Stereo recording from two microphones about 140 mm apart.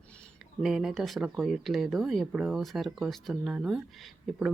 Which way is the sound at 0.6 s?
5° right (ahead or behind).